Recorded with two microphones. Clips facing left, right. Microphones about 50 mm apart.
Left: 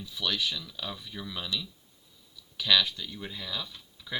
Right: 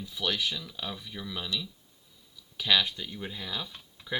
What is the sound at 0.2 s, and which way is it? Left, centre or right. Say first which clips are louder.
Speech: even; centre.